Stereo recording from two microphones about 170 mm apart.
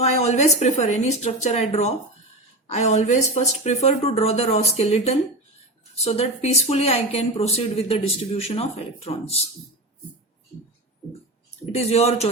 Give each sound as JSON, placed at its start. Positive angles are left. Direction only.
{"t": 0.0, "sound": "speech", "side_deg": 40}
{"t": 2.6, "sound": "speech", "side_deg": 40}
{"t": 11.7, "sound": "speech", "side_deg": 40}